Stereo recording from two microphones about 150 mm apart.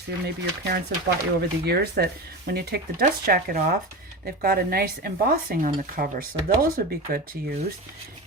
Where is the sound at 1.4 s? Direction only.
90° right.